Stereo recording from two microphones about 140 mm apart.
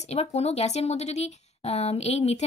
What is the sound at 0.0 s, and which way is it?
Speech, 50° left (ahead or behind).